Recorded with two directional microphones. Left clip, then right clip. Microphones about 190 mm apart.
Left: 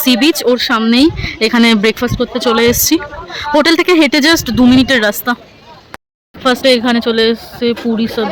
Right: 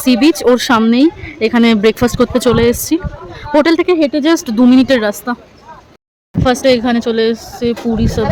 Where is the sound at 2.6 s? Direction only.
5° right (ahead or behind).